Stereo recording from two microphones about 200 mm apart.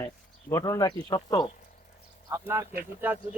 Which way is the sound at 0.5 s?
15° left (ahead or behind).